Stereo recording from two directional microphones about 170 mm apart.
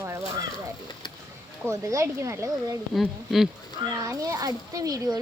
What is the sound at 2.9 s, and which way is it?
Speech, centre (ahead or behind).